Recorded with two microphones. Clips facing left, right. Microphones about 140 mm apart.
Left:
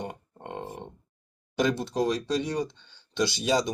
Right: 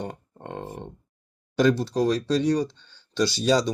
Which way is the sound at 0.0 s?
15° left (ahead or behind).